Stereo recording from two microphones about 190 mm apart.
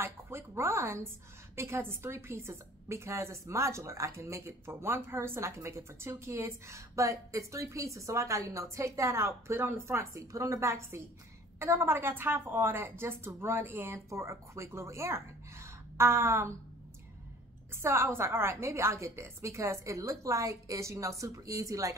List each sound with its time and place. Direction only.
0.0 s a woman's voice: 15° right (ahead or behind)
17.8 s a woman's voice: 15° right (ahead or behind)